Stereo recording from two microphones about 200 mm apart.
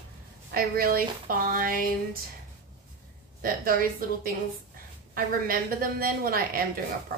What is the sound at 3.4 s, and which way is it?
Speech, 45° right (ahead or behind).